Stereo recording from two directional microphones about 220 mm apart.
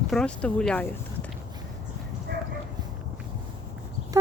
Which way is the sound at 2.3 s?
50° right (ahead or behind).